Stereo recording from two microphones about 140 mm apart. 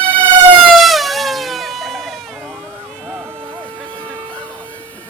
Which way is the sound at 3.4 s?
35° right (ahead or behind).